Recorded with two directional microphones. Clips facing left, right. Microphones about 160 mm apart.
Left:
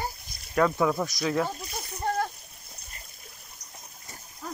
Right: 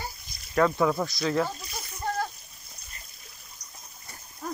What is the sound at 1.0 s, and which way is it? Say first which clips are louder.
Speech: right 1 dB; 15° left (ahead or behind).